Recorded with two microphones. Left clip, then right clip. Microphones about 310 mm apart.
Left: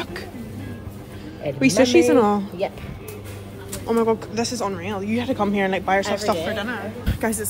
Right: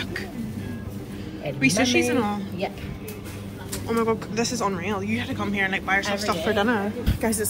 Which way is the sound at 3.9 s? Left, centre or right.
Centre.